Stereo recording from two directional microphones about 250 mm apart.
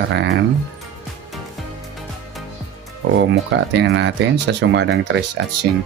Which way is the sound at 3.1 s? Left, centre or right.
Right.